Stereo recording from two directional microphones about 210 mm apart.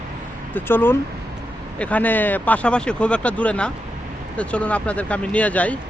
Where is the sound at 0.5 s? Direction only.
10° left (ahead or behind).